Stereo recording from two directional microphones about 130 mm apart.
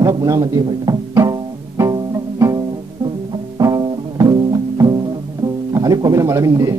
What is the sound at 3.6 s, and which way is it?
Music, 30° right (ahead or behind).